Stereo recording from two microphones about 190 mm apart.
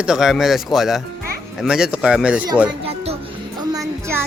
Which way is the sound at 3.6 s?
20° right (ahead or behind).